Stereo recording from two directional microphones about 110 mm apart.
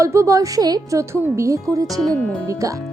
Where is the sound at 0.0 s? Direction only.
30° right (ahead or behind).